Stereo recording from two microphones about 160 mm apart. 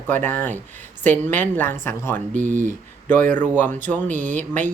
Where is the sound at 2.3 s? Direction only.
50° right (ahead or behind).